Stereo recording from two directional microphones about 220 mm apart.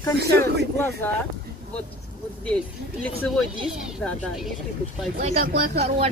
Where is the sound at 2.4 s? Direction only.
5° left (ahead or behind).